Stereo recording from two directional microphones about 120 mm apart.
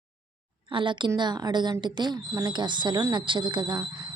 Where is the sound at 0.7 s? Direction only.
45° right (ahead or behind).